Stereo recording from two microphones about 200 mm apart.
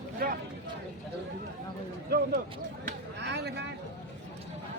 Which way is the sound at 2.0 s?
50° right (ahead or behind).